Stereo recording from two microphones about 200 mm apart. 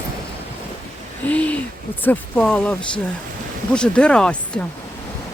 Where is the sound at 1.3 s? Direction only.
5° left (ahead or behind).